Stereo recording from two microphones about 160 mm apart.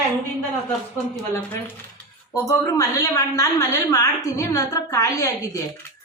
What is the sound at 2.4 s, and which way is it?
A woman's voice, 20° left (ahead or behind).